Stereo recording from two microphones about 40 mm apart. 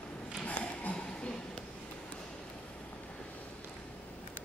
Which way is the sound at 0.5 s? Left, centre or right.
Left.